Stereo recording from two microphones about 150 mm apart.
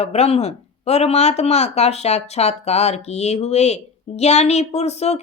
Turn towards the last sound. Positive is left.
turn(degrees=45)  # may be behind; listen again after turning